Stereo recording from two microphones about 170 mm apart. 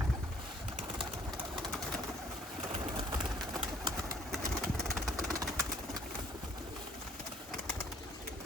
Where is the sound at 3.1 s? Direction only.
20° right (ahead or behind).